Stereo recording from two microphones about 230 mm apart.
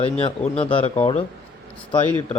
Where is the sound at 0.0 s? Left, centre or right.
Left.